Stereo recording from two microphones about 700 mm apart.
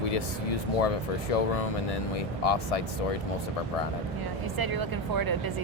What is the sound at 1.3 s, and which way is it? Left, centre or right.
Speech, left.